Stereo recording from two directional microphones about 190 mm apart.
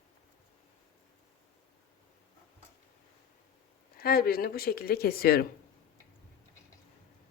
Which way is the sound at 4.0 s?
50° left (ahead or behind).